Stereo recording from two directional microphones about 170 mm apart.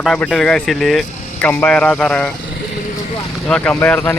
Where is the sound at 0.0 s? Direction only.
5° left (ahead or behind).